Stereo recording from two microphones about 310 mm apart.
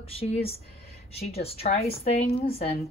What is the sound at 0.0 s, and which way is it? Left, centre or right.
Speech, centre.